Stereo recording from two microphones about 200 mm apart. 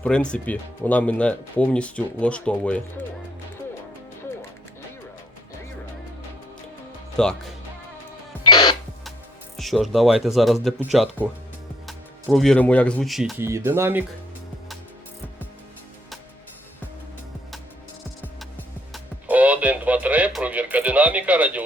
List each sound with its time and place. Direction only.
0.0 s speech: 5° left (ahead or behind)
7.2 s speech: 5° left (ahead or behind)
8.4 s music: 20° left (ahead or behind)
9.6 s speech: centre (ahead or behind)
13.7 s speech: 10° right (ahead or behind)
18.9 s radio: 5° right (ahead or behind)